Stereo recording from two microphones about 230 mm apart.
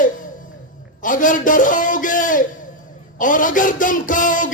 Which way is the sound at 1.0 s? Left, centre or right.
Left.